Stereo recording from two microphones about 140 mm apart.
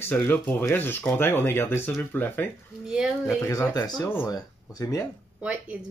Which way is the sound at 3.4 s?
20° left (ahead or behind).